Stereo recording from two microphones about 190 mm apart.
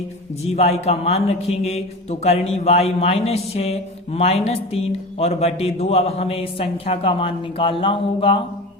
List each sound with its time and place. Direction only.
0.4 s a man's voice: 35° left (ahead or behind)